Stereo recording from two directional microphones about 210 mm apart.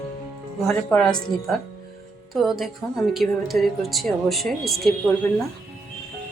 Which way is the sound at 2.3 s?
Centre (ahead or behind).